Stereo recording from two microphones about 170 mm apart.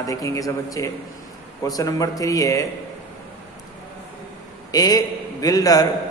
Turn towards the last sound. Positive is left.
turn(degrees=20)  # may be behind; listen again after turning